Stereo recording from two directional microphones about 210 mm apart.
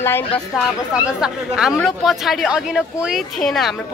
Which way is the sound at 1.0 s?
5° right (ahead or behind).